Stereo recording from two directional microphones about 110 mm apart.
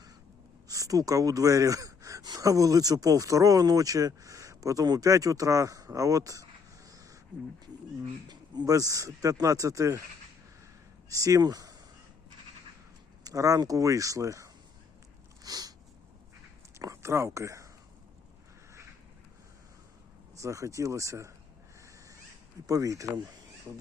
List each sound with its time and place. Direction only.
0.7 s speech: 30° right (ahead or behind)
6.9 s a sound: 30° right (ahead or behind)
8.3 s speech: 35° right (ahead or behind)
11.1 s speech: 30° right (ahead or behind)
13.2 s speech: 30° right (ahead or behind)
15.4 s a sound: 35° right (ahead or behind)
16.7 s a sound: 25° right (ahead or behind)
20.3 s speech: 30° right (ahead or behind)
22.6 s speech: 30° right (ahead or behind)